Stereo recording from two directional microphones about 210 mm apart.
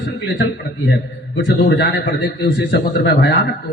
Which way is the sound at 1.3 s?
50° left (ahead or behind).